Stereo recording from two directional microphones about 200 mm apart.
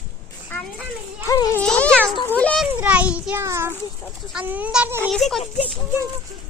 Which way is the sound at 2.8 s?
5° right (ahead or behind).